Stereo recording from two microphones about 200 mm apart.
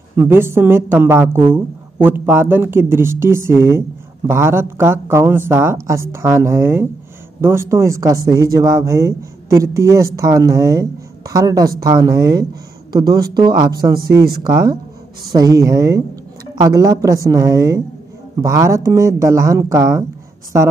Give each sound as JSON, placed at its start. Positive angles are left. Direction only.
{"t": 0.1, "sound": "a woman's voice", "side_deg": -10}
{"t": 14.2, "sound": "speech", "side_deg": -50}
{"t": 14.5, "sound": "a woman's voice", "side_deg": -20}